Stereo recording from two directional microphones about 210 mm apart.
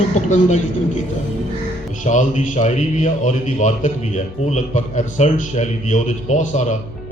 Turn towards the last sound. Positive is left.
turn(degrees=35)  # may be behind; listen again after turning